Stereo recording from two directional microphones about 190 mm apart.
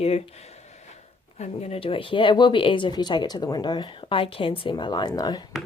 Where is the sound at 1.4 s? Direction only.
35° left (ahead or behind).